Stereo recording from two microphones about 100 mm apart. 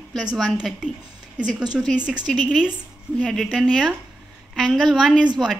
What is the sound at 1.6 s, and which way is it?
Speech, 45° right (ahead or behind).